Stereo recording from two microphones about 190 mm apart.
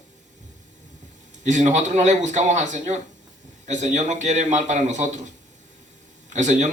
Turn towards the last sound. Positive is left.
turn(degrees=-40)  # may be behind; listen again after turning